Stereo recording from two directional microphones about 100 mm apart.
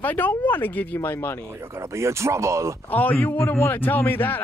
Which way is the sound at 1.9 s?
30° right (ahead or behind).